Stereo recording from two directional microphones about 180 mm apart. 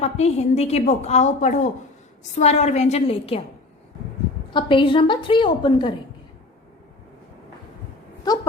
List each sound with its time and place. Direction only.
0.0 s a woman's voice: 35° left (ahead or behind)
4.5 s a woman's voice: 30° left (ahead or behind)